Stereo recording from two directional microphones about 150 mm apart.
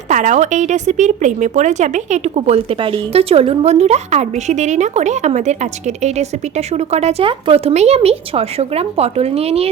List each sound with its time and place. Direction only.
0.1 s speech: 55° right (ahead or behind)